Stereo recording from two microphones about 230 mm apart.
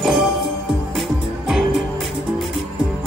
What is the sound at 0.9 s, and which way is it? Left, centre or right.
Music, centre.